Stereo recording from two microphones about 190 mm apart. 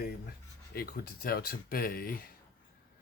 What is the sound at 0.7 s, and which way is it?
Speech, 50° left (ahead or behind).